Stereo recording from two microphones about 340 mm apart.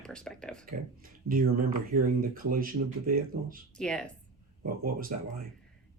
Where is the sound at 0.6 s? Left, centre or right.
Right.